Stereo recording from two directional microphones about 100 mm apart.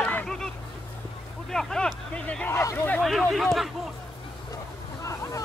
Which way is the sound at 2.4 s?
30° left (ahead or behind).